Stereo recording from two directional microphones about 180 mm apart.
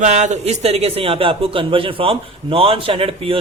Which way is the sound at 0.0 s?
40° right (ahead or behind).